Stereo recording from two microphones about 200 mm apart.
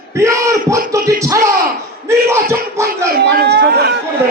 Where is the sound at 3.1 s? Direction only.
55° right (ahead or behind).